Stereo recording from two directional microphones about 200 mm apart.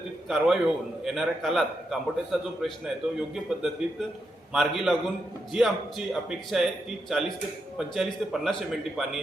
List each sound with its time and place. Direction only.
0.3 s a man's voice: centre (ahead or behind)